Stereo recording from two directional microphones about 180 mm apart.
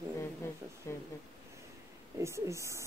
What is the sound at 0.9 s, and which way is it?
Speech, 15° left (ahead or behind).